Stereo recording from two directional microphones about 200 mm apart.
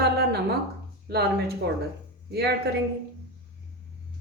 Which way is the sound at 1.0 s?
55° right (ahead or behind).